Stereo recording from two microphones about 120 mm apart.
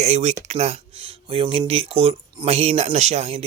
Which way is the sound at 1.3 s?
50° right (ahead or behind).